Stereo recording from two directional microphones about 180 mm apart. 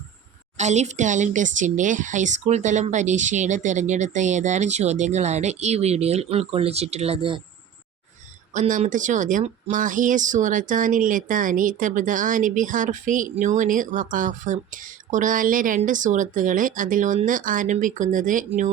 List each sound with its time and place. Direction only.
0.5 s speech: 40° right (ahead or behind)
8.5 s speech: 45° right (ahead or behind)